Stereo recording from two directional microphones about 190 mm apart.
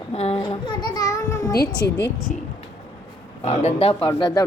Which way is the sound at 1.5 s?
65° left (ahead or behind).